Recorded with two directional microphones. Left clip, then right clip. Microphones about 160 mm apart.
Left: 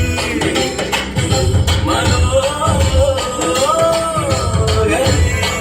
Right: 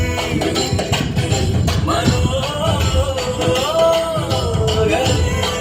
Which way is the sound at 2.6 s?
25° left (ahead or behind).